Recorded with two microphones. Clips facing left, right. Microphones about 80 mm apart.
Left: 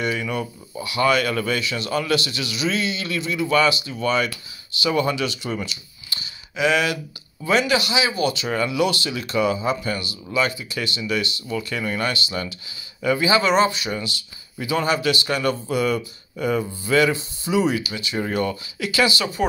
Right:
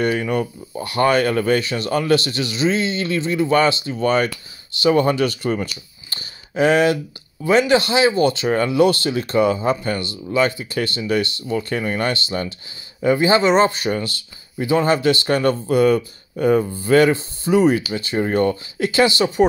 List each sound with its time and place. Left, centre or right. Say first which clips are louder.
0.0 s speech: right 5 dB; right
13.7 s speech: right 4 dB; right